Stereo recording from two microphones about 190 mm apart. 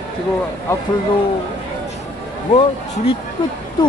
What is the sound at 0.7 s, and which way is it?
Speech, 15° left (ahead or behind).